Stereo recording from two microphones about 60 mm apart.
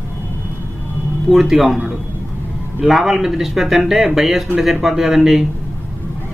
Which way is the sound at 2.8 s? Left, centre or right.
Centre.